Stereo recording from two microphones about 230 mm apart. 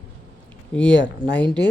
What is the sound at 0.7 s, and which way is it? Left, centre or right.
Speech, centre.